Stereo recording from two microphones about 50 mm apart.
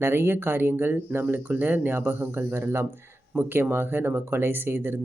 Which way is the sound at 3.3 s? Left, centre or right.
Right.